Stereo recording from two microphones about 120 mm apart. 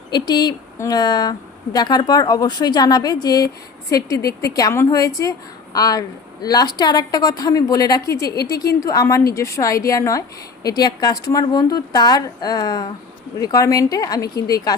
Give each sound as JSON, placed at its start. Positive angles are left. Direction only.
{"t": 0.1, "sound": "a woman's voice", "side_deg": 35}